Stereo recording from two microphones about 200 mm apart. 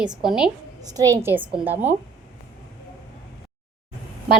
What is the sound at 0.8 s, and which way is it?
A woman's voice, 20° right (ahead or behind).